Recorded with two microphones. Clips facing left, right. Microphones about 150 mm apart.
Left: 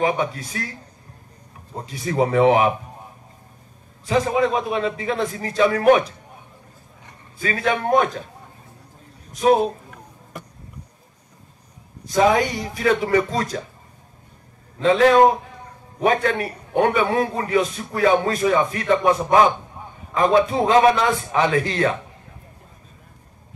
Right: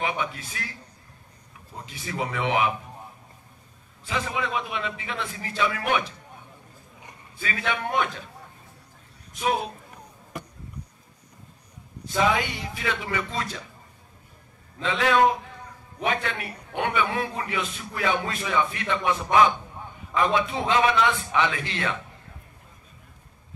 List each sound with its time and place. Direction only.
0.0 s a man's voice: 40° left (ahead or behind)
1.8 s a man's voice: 40° left (ahead or behind)
4.0 s a man's voice: 40° left (ahead or behind)
7.3 s a man's voice: 40° left (ahead or behind)
9.3 s a man's voice: 40° left (ahead or behind)
12.1 s a man's voice: 40° left (ahead or behind)
14.8 s a man's voice: 40° left (ahead or behind)